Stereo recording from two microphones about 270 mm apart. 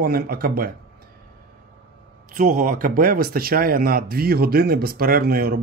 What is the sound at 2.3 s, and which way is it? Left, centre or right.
A man's voice, right.